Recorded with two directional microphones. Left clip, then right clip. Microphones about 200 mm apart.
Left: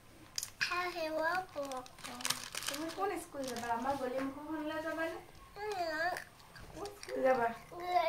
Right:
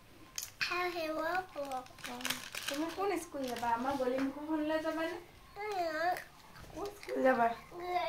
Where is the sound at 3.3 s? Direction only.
40° right (ahead or behind).